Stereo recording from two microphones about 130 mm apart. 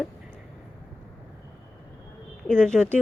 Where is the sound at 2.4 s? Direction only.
5° left (ahead or behind).